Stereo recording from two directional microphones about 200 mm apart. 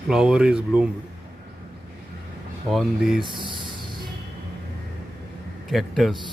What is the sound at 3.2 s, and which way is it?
Speech, 25° right (ahead or behind).